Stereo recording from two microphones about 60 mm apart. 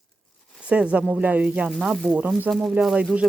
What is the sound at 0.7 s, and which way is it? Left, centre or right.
Speech, centre.